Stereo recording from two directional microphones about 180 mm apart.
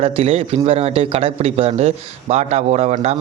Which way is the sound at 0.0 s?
35° right (ahead or behind).